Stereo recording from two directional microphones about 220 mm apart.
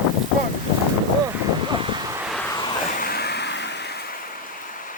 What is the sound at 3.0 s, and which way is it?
Vehicle, 45° left (ahead or behind).